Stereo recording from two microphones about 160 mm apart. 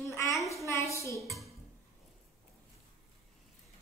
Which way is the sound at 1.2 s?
Centre (ahead or behind).